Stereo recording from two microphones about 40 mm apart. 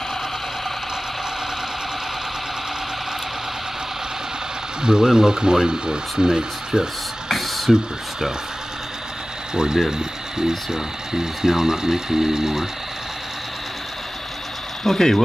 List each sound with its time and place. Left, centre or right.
4.8 s speech: centre
7.2 s a sound: centre
9.5 s speech: centre
14.8 s speech: centre